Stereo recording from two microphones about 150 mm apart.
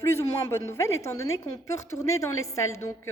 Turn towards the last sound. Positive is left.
turn(degrees=20)  # may be behind; listen again after turning